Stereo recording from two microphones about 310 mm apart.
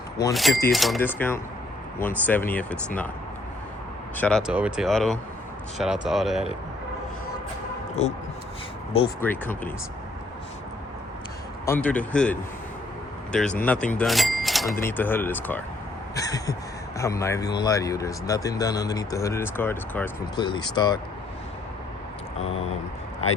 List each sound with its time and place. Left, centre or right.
0.3 s speech: centre
4.2 s speech: centre
8.0 s speech: left
9.2 s speech: centre
11.6 s a man's voice: centre